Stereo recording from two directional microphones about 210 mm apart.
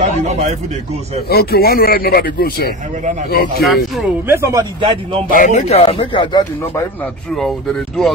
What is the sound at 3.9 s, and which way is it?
Speech, 10° right (ahead or behind).